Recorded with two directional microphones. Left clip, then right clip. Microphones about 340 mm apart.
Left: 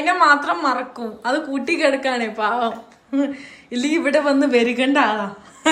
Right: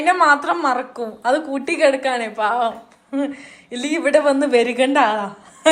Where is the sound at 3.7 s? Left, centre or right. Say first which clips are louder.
Right 2 dB; centre.